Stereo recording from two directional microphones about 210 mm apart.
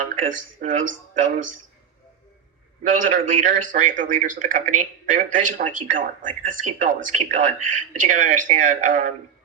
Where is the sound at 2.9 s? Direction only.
40° right (ahead or behind).